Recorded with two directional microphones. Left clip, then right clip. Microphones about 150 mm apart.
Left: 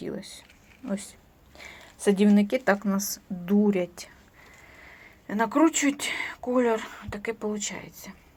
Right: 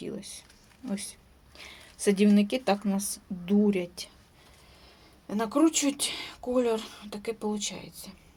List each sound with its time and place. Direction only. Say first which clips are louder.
0.0 s speech: left 3 dB; centre (ahead or behind)
1.6 s a sound: left 2 dB; 5° right (ahead or behind)
2.2 s speech: left 3 dB; 10° right (ahead or behind)
5.3 s speech: left 3 dB; centre (ahead or behind)
7.9 s speech: left 2 dB; 45° left (ahead or behind)